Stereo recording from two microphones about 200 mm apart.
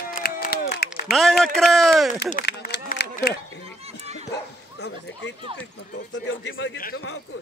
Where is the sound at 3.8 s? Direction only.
30° right (ahead or behind).